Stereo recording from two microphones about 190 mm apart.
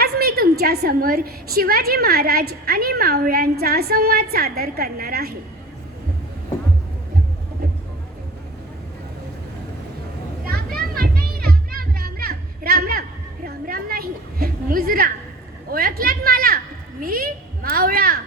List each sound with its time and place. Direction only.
0.0 s a woman's voice: 55° right (ahead or behind)
10.8 s music: 50° right (ahead or behind)
15.7 s a sound: 50° right (ahead or behind)